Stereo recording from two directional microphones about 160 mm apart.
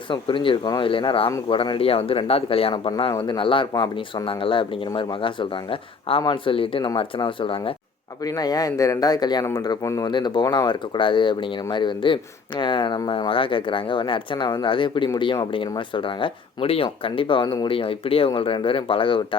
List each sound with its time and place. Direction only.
0.1 s speech: 30° left (ahead or behind)